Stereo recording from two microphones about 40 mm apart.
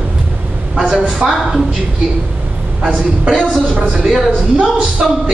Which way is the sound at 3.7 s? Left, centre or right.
Right.